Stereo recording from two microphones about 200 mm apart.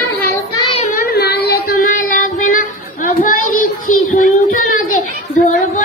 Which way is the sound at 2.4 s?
40° left (ahead or behind).